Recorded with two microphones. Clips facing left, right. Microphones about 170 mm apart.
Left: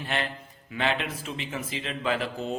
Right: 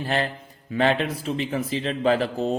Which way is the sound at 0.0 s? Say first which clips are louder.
Right 6 dB; 35° right (ahead or behind).